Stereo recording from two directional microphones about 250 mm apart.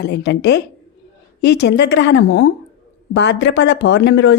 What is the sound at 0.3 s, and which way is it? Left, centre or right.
Speech, left.